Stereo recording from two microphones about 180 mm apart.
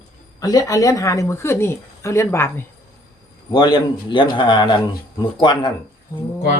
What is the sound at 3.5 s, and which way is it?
A man's voice, 25° left (ahead or behind).